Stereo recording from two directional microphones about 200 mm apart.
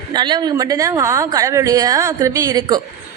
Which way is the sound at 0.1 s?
20° right (ahead or behind).